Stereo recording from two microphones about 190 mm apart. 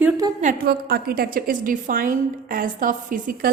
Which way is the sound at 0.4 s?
55° right (ahead or behind).